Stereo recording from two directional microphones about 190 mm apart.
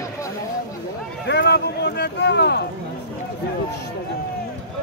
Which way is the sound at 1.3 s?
60° left (ahead or behind).